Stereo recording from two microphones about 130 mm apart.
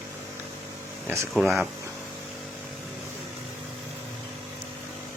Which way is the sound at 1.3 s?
Centre (ahead or behind).